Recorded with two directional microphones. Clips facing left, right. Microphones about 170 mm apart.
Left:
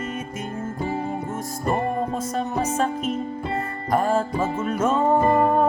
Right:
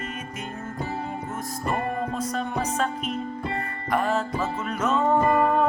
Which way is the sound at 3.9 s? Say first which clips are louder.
Left 3 dB; 45° left (ahead or behind).